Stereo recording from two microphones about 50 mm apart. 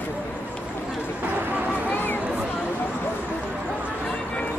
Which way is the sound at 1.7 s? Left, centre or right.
Left.